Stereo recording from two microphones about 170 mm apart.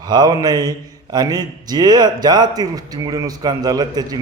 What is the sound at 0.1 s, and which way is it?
Speech, 25° right (ahead or behind).